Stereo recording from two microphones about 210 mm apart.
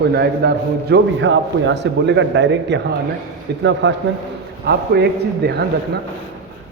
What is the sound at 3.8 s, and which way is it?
A man's voice, 60° right (ahead or behind).